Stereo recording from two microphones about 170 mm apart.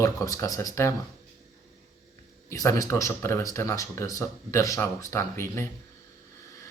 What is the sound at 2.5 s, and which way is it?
Speech, 20° left (ahead or behind).